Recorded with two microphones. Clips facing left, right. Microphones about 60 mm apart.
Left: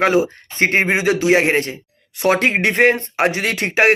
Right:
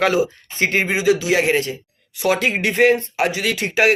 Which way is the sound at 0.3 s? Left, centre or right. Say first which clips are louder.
Left 3 dB; left.